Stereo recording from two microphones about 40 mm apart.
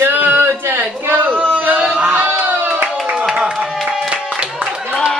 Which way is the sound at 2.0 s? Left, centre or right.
Right.